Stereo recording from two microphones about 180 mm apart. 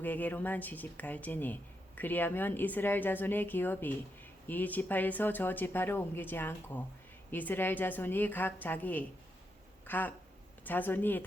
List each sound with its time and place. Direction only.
0.0 s speech: 10° left (ahead or behind)